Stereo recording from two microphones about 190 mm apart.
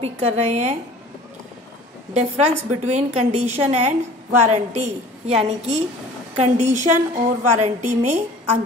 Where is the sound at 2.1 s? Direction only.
35° right (ahead or behind).